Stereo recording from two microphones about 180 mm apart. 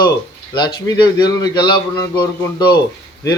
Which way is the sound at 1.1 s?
25° left (ahead or behind).